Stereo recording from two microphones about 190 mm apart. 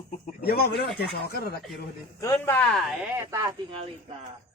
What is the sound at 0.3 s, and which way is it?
Speech, 55° left (ahead or behind).